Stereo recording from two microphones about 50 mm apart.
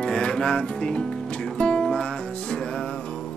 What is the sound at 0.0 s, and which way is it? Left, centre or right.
Music, centre.